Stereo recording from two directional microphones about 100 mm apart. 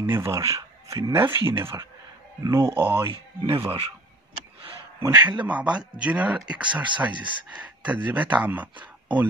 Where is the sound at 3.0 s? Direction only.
55° right (ahead or behind).